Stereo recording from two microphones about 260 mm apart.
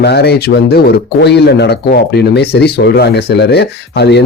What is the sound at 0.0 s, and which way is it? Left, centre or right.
Speech, left.